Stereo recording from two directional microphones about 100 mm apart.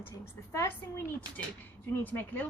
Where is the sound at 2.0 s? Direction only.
20° left (ahead or behind).